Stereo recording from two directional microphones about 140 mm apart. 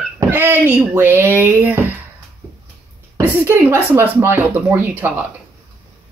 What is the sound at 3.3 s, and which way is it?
Speech, 15° right (ahead or behind).